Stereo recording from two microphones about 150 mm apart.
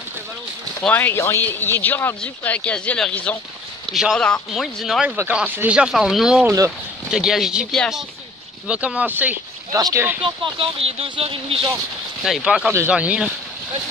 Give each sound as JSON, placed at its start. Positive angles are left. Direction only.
{"t": 0.8, "sound": "speech", "side_deg": 15}
{"t": 5.1, "sound": "speech", "side_deg": -10}
{"t": 9.8, "sound": "speech", "side_deg": -25}
{"t": 12.3, "sound": "speech", "side_deg": -5}